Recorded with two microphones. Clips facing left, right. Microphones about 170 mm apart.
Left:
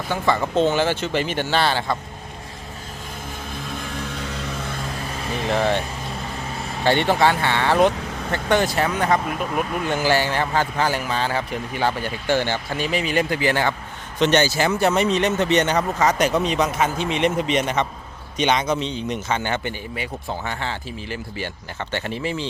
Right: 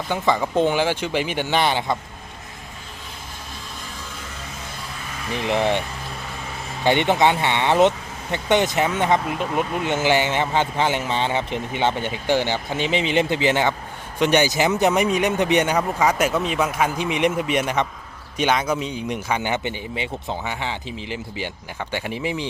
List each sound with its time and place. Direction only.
0.1 s speech: 15° right (ahead or behind)
5.3 s speech: 15° right (ahead or behind)
6.8 s speech: 20° right (ahead or behind)